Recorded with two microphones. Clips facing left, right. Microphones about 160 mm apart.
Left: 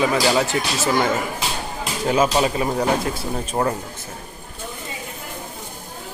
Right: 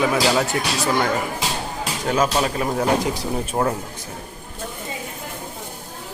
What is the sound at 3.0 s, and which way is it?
Speech, 15° right (ahead or behind).